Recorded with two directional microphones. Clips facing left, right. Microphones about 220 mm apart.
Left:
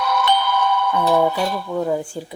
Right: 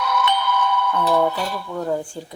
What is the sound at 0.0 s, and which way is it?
Music, 35° left (ahead or behind).